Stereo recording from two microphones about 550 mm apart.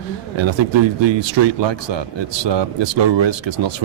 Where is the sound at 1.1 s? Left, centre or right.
Right.